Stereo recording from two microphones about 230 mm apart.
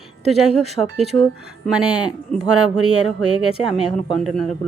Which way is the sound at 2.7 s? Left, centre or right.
Right.